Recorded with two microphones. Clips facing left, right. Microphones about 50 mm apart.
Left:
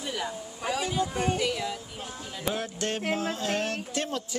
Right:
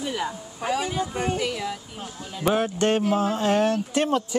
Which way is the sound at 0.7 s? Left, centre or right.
Centre.